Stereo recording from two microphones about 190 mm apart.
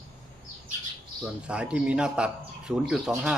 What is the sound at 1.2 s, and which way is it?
Speech, 5° right (ahead or behind).